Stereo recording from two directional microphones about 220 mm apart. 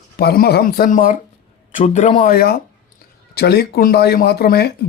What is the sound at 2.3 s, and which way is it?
Speech, 45° left (ahead or behind).